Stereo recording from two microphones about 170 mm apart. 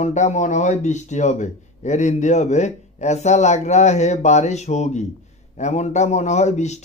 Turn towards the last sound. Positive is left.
turn(degrees=40)  # may be behind; listen again after turning